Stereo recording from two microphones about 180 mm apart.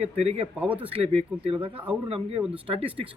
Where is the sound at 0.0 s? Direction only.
35° right (ahead or behind).